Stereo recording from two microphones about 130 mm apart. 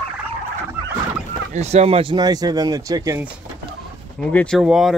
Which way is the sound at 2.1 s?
30° right (ahead or behind).